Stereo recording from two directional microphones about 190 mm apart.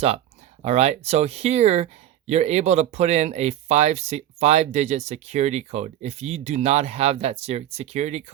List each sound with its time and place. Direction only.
0.6 s speech: 35° right (ahead or behind)